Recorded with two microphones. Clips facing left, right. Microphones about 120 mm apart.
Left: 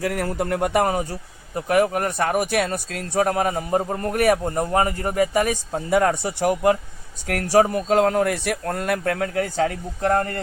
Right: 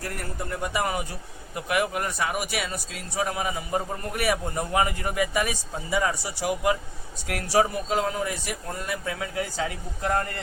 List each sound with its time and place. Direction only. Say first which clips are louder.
0.0 s speech: left 10 dB; 90° left; by 10.4 s 45° left (ahead or behind)